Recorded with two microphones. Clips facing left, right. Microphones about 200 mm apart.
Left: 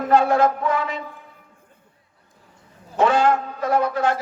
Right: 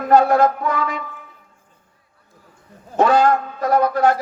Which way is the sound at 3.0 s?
40° right (ahead or behind).